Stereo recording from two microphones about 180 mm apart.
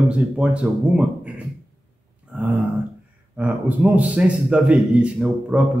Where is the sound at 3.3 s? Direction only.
5° right (ahead or behind).